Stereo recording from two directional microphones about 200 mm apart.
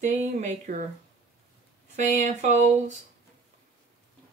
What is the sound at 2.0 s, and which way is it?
Speech, 35° right (ahead or behind).